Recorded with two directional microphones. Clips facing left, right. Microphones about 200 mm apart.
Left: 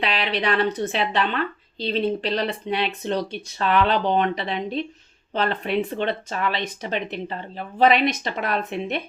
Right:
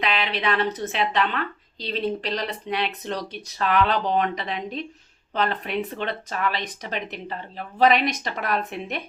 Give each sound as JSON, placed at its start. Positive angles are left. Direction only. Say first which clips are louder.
{"t": 0.0, "sound": "a woman's voice", "louder": "left 1 dB", "side_deg": 30}